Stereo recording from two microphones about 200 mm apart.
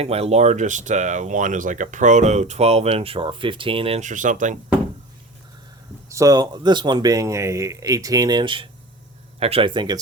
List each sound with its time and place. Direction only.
0.0 s speech: 30° right (ahead or behind)
6.1 s speech: 15° right (ahead or behind)